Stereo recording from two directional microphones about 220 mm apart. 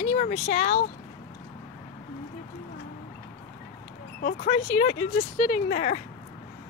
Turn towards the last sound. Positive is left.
turn(degrees=35)  # may be behind; listen again after turning